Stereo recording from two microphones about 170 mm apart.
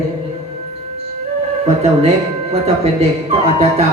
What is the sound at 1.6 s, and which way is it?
A man's voice, 40° right (ahead or behind).